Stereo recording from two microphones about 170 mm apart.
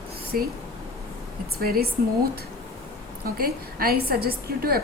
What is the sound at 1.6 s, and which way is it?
A woman's voice, 60° right (ahead or behind).